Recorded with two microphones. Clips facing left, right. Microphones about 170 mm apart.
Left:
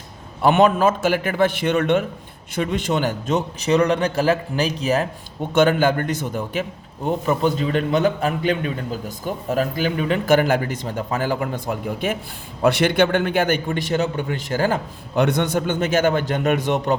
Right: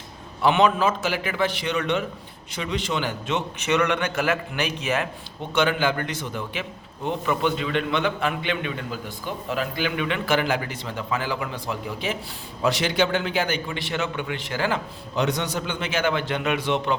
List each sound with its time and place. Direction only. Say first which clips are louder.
0.4 s a man's voice: left 4 dB; 50° left (ahead or behind)
15.1 s a man's voice: left 6 dB; 60° left (ahead or behind)